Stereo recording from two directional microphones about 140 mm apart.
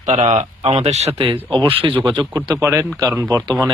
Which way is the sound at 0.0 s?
55° right (ahead or behind).